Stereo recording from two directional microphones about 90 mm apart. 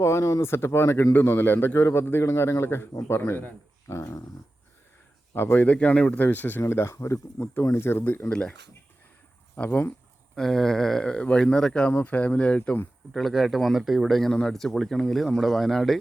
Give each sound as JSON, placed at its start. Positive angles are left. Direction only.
{"t": 0.0, "sound": "speech", "side_deg": 30}
{"t": 5.3, "sound": "speech", "side_deg": 20}
{"t": 9.6, "sound": "speech", "side_deg": 20}
{"t": 10.3, "sound": "speech", "side_deg": 5}
{"t": 13.1, "sound": "speech", "side_deg": 0}